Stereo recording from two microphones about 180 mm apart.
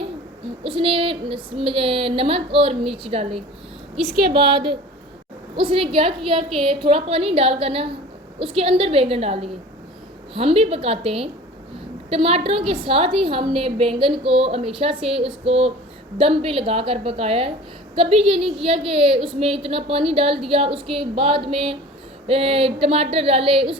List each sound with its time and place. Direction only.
0.6 s a woman's voice: 30° right (ahead or behind)
4.1 s a woman's voice: 60° right (ahead or behind)
5.5 s a woman's voice: 30° right (ahead or behind)
20.9 s a sound: 30° right (ahead or behind)
22.3 s a woman's voice: 35° right (ahead or behind)